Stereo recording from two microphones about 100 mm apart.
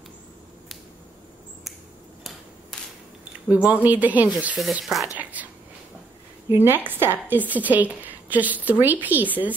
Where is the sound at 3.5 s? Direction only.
15° right (ahead or behind).